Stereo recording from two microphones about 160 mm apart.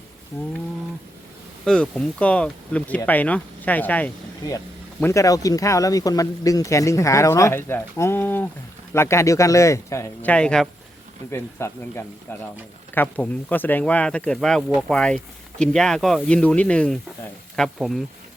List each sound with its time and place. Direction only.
1.6 s speech: 5° left (ahead or behind)
10.3 s speech: 5° left (ahead or behind)
11.3 s speech: 15° left (ahead or behind); by 18.0 s centre (ahead or behind)